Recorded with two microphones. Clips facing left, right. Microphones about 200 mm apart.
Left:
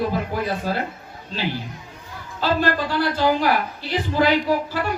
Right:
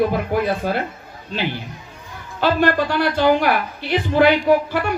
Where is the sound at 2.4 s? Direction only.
60° right (ahead or behind).